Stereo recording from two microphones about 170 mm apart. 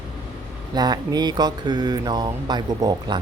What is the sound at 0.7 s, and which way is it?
Speech, 25° right (ahead or behind).